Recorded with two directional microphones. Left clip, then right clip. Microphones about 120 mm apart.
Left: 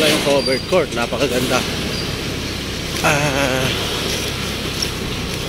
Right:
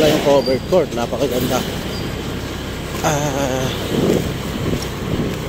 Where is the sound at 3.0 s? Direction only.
15° right (ahead or behind).